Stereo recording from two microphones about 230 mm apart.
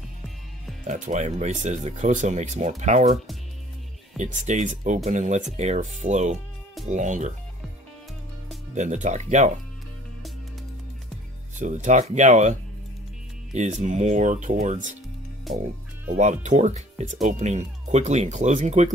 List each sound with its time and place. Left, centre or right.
0.8 s speech: right
4.2 s speech: right
8.7 s speech: right
11.5 s speech: right
16.2 s speech: right